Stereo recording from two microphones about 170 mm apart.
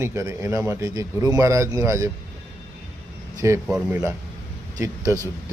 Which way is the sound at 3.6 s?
5° right (ahead or behind).